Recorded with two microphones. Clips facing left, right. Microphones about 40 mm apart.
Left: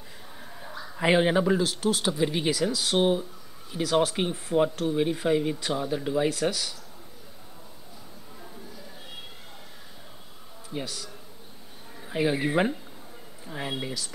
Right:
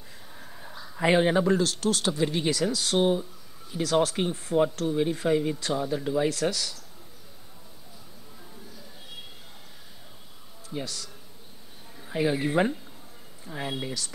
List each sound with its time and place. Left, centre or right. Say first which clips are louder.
0.4 s a man's voice: left 3 dB; centre
10.7 s speech: even; centre